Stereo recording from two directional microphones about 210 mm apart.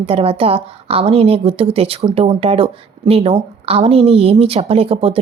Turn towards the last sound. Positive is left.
turn(degrees=-25)  # may be behind; listen again after turning